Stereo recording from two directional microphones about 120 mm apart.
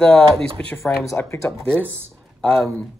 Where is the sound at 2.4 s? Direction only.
5° left (ahead or behind).